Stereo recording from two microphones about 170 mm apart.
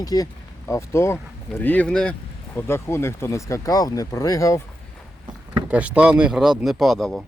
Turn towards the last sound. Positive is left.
turn(degrees=0)  # may be behind; listen again after turning